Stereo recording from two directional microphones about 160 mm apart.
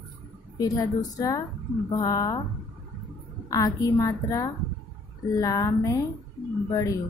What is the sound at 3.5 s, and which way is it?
Speech, 20° left (ahead or behind).